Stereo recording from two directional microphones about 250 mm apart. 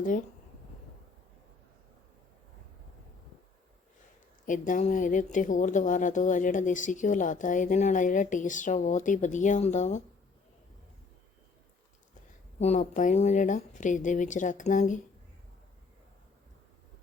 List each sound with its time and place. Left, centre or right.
4.4 s speech: left
12.5 s speech: left